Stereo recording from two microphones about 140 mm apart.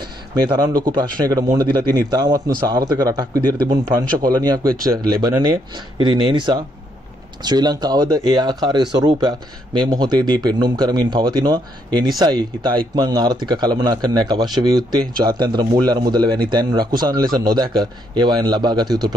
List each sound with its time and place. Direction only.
0.4 s a man's voice: 30° right (ahead or behind)